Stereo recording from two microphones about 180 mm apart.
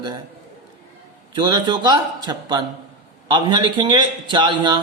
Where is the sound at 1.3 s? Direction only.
25° right (ahead or behind).